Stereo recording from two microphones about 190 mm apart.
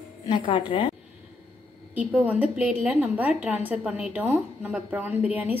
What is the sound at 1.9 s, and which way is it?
A woman's voice, 5° right (ahead or behind).